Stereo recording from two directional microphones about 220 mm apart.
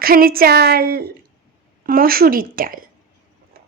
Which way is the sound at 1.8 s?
40° right (ahead or behind).